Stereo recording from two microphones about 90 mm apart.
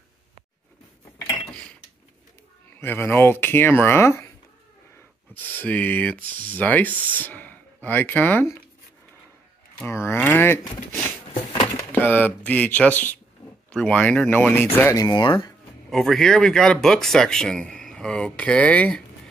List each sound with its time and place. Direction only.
2.8 s speech: 25° left (ahead or behind)
5.3 s speech: 20° left (ahead or behind)
9.8 s speech: 30° left (ahead or behind)
15.0 s speech: 55° left (ahead or behind)
15.9 s speech: 5° left (ahead or behind)